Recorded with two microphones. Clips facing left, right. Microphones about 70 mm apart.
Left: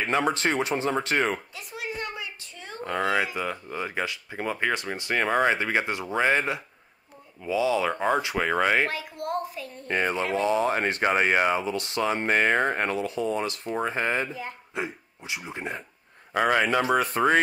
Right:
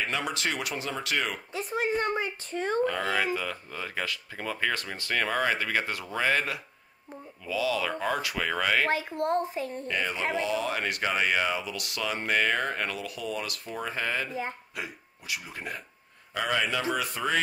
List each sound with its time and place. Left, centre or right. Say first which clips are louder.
0.0 s speech: left 6 dB; left
1.5 s a sound: right 7 dB; right
2.8 s speech: left 5 dB; left
8.9 s a child's voice: right 3 dB; right
9.8 s speech: left 7 dB; left
16.3 s speech: left 6 dB; left